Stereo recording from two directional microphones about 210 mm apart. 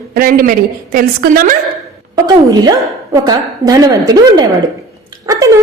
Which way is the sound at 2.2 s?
20° right (ahead or behind).